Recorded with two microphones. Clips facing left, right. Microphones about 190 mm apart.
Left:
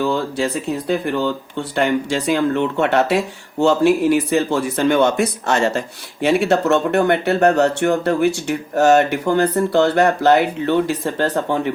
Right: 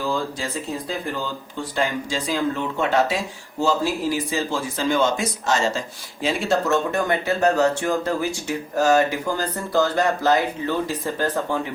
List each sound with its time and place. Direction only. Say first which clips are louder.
0.0 s speech: left 6 dB; 65° left (ahead or behind)